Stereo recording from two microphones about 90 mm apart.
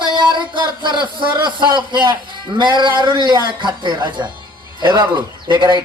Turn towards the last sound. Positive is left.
turn(degrees=-55)  # may be behind; listen again after turning